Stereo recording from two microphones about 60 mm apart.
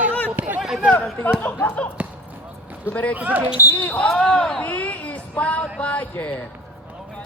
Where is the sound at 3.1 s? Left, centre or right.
Right.